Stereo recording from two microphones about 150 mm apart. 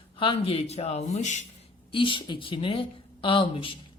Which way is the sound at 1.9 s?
35° left (ahead or behind).